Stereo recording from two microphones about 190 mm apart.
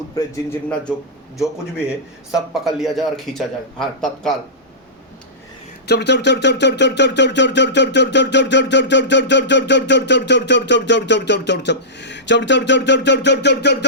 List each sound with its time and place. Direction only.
2.3 s a man's voice: centre (ahead or behind)
5.9 s speech: 65° left (ahead or behind)